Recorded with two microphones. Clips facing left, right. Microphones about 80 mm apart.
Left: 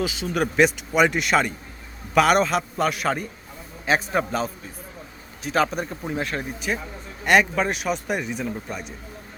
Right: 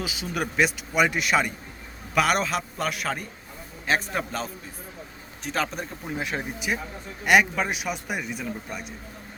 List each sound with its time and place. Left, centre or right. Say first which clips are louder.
0.0 s a man's voice: left 5 dB; centre
6.2 s a man's voice: left 1 dB; centre